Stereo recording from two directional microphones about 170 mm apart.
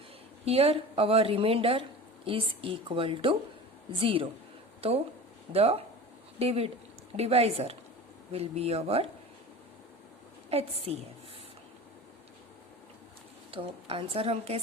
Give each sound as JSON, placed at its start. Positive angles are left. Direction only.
{"t": 0.4, "sound": "a woman's voice", "side_deg": -35}
{"t": 10.5, "sound": "a woman's voice", "side_deg": -35}
{"t": 13.5, "sound": "a woman's voice", "side_deg": -30}